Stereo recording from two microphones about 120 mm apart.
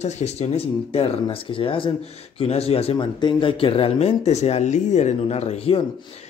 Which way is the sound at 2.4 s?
60° left (ahead or behind).